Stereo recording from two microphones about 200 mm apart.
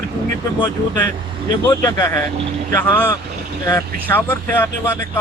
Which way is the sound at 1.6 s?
15° left (ahead or behind).